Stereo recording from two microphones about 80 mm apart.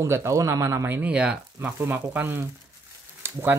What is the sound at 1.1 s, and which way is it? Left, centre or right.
Speech, centre.